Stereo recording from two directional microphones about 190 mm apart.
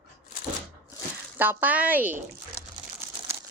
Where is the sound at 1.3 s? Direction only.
10° right (ahead or behind).